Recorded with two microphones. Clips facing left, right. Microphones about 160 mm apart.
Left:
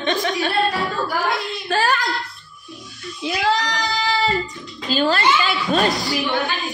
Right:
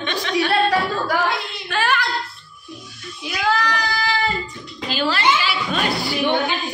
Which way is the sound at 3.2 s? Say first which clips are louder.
Left 1 dB; 30° left (ahead or behind).